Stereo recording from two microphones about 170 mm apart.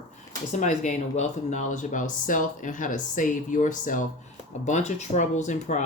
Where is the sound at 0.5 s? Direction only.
45° left (ahead or behind).